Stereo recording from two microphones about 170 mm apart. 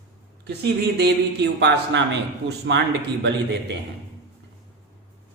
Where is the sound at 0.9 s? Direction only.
75° right (ahead or behind); by 3.6 s 90° right.